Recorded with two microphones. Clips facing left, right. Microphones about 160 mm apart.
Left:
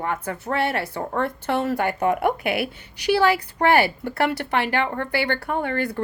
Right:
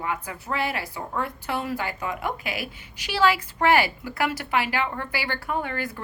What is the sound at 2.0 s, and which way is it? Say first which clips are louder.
Speech: left 9 dB; 65° left (ahead or behind).